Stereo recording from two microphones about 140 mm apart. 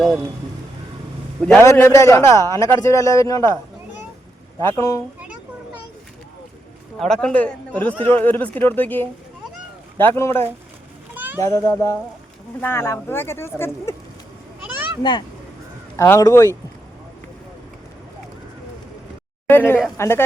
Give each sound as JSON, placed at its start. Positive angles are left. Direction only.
{"t": 1.4, "sound": "a man's voice", "side_deg": 5}
{"t": 1.6, "sound": "a man's voice", "side_deg": 20}
{"t": 4.8, "sound": "a man's voice", "side_deg": 20}
{"t": 7.0, "sound": "speech", "side_deg": 5}
{"t": 11.1, "sound": "a sound", "side_deg": -15}
{"t": 11.3, "sound": "a man's voice", "side_deg": 20}
{"t": 15.0, "sound": "a man's voice", "side_deg": 30}
{"t": 19.5, "sound": "speech", "side_deg": 15}